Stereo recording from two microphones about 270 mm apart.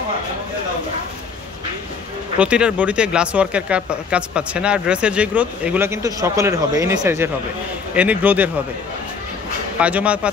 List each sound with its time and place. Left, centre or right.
2.3 s speech: centre
9.8 s speech: centre